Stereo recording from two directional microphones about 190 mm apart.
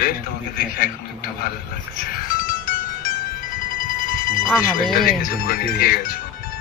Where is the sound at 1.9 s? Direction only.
45° left (ahead or behind).